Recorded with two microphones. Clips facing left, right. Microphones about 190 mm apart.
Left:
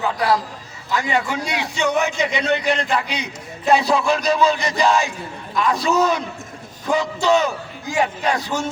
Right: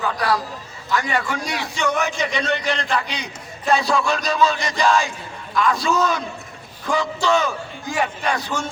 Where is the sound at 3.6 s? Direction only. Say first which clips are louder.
Left 2 dB; 20° left (ahead or behind).